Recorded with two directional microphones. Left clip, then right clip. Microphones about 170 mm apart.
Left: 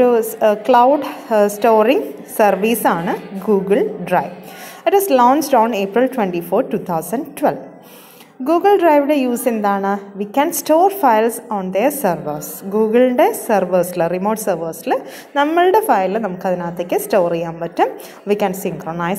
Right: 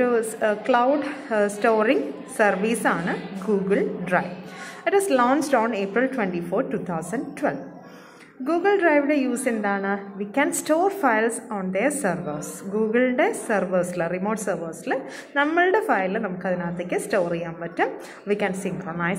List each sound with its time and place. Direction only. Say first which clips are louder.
0.0 s a woman's voice: left 8 dB; 25° left (ahead or behind)